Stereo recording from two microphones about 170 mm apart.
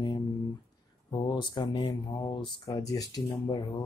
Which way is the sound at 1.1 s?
25° left (ahead or behind).